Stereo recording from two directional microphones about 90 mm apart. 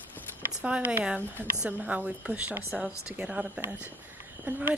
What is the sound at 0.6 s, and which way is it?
Speech, 15° right (ahead or behind).